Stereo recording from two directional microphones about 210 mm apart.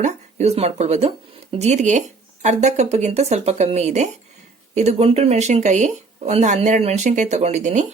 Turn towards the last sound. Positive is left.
turn(degrees=-35)  # may be behind; listen again after turning